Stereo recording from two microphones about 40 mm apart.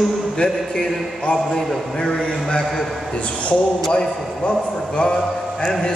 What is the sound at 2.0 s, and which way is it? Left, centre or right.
A man's voice, left.